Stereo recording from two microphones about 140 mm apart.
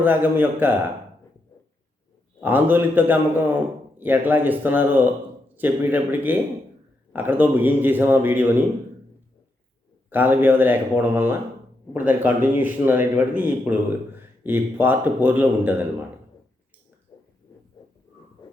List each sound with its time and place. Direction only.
0.0 s a man's voice: 15° right (ahead or behind)
2.4 s a man's voice: 15° right (ahead or behind)
10.1 s a man's voice: 15° right (ahead or behind)
17.1 s a sound: 30° left (ahead or behind)